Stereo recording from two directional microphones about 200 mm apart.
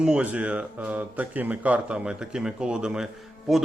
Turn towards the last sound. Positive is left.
turn(degrees=0)  # may be behind; listen again after turning